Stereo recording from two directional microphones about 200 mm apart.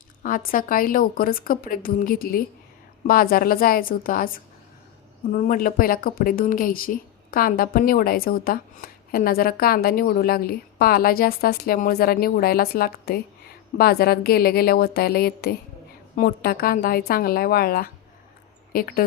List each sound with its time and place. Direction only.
0.2 s a woman's voice: 45° left (ahead or behind)